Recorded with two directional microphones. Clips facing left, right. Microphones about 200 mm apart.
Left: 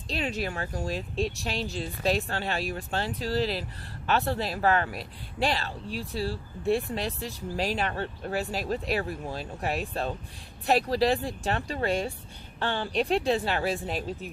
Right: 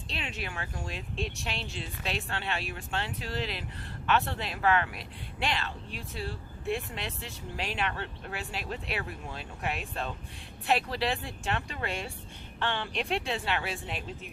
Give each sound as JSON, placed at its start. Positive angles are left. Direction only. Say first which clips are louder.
{"t": 0.1, "sound": "speech", "louder": "left 8 dB", "side_deg": 40}